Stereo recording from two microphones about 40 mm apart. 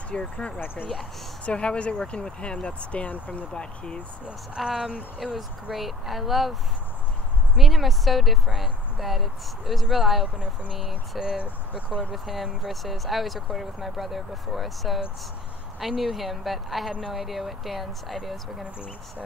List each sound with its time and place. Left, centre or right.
0.1 s speech: left
3.5 s speech: left
4.6 s speech: centre
7.5 s speech: centre
11.1 s speech: right
12.1 s speech: centre